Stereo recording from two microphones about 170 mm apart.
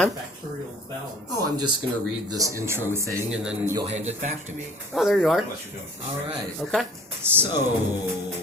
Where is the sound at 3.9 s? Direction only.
40° right (ahead or behind).